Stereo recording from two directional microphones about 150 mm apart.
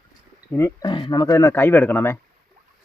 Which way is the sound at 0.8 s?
30° left (ahead or behind).